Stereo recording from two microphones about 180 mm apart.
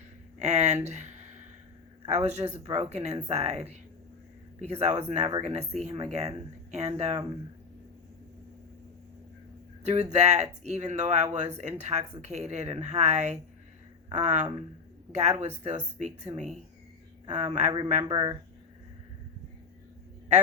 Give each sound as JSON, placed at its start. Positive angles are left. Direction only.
{"t": 0.3, "sound": "speech", "side_deg": -40}
{"t": 9.8, "sound": "speech", "side_deg": -40}
{"t": 18.1, "sound": "speech", "side_deg": -25}